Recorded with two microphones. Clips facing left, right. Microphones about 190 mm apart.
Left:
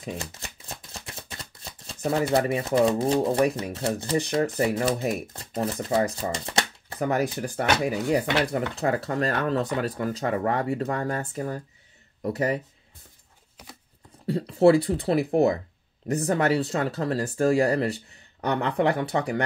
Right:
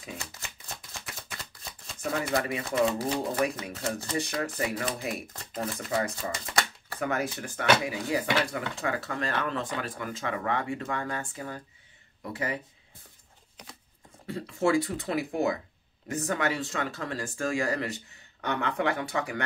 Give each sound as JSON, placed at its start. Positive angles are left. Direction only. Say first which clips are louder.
{"t": 0.0, "sound": "speech", "louder": "left 7 dB", "side_deg": 35}
{"t": 14.2, "sound": "speech", "louder": "left 9 dB", "side_deg": 35}